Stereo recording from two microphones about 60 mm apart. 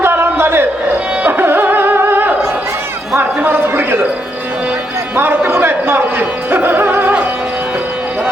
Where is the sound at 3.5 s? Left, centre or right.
Right.